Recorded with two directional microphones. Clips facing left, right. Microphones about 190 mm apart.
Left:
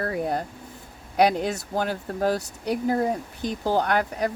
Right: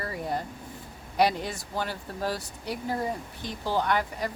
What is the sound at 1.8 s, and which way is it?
Speech, 50° left (ahead or behind).